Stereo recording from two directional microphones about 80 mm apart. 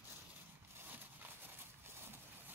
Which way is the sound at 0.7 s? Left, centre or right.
Right.